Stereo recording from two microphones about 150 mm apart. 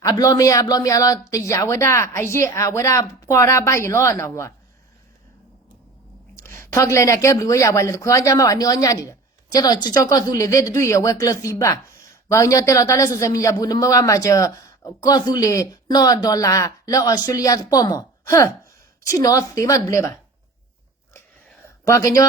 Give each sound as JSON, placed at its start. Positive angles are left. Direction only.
{"t": 0.0, "sound": "a man's voice", "side_deg": 25}
{"t": 6.3, "sound": "a man's voice", "side_deg": 15}
{"t": 21.8, "sound": "a man's voice", "side_deg": 20}